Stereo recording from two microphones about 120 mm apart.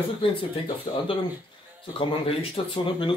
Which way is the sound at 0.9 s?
55° left (ahead or behind).